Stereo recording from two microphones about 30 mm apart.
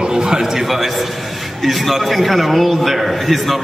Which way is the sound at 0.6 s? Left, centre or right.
Centre.